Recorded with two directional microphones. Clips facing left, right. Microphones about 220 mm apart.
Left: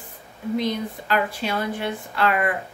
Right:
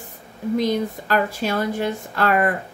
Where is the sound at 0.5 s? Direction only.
45° right (ahead or behind).